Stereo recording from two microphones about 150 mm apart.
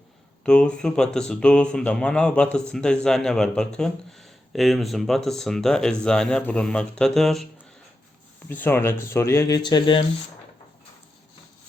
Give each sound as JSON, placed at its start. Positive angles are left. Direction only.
{"t": 0.4, "sound": "speech", "side_deg": 5}
{"t": 8.4, "sound": "speech", "side_deg": 15}